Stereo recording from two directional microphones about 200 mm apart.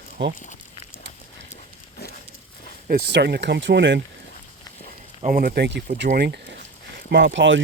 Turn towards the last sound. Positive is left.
turn(degrees=-65)  # may be behind; listen again after turning